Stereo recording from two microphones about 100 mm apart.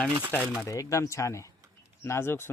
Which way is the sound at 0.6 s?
35° left (ahead or behind).